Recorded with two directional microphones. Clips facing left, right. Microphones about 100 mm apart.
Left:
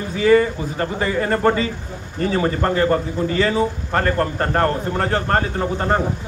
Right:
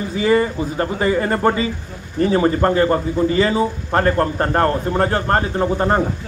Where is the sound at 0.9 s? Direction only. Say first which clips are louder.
Right 2 dB; 5° right (ahead or behind).